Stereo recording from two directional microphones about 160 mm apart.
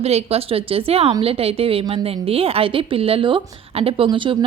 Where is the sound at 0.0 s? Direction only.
40° right (ahead or behind).